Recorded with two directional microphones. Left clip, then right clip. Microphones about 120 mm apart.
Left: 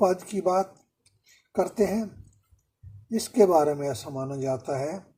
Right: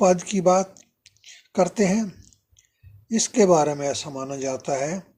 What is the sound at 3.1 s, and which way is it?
Speech, 50° right (ahead or behind).